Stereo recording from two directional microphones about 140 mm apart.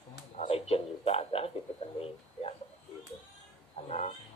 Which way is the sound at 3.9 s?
50° left (ahead or behind).